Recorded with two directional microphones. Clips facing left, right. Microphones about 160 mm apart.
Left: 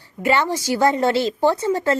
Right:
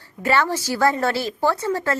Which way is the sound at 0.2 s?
15° left (ahead or behind).